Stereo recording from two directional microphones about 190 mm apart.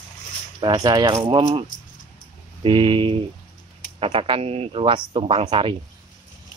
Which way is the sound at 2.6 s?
25° right (ahead or behind).